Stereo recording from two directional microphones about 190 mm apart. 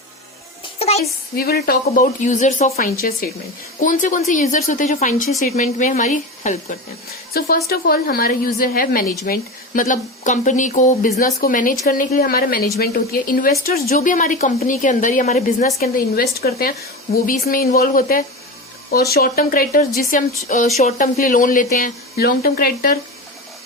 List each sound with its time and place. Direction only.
0.8 s a sound: 35° left (ahead or behind)
1.4 s a woman's voice: 55° left (ahead or behind)
7.3 s speech: 55° left (ahead or behind)